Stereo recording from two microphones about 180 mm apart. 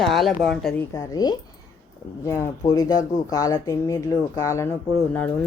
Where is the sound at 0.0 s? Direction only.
Centre (ahead or behind).